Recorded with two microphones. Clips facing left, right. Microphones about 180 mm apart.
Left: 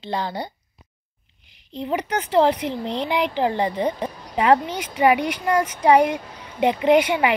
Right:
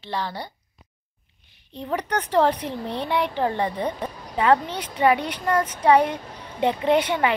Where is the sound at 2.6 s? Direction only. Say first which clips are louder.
Left 3 dB; 90° left.